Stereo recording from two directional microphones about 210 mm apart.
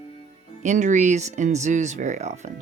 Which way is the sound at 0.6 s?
35° right (ahead or behind).